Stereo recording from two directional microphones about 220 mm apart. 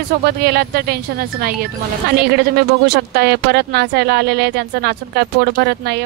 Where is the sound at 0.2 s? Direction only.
45° right (ahead or behind).